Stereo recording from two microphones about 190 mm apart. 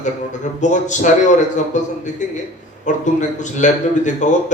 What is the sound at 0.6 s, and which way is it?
A man's voice, 40° left (ahead or behind).